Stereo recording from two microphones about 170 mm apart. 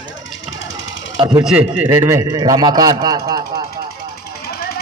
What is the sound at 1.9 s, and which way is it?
A man's voice, 20° right (ahead or behind).